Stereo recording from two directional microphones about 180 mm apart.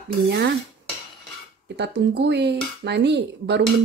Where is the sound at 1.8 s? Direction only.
70° right (ahead or behind).